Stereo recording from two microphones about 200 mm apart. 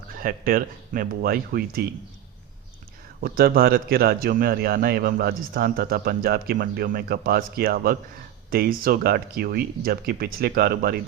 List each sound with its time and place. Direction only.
0.1 s a man's voice: 45° right (ahead or behind)
3.2 s a man's voice: 50° right (ahead or behind)